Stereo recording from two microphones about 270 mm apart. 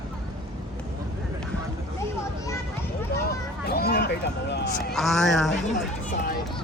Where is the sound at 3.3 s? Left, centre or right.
Left.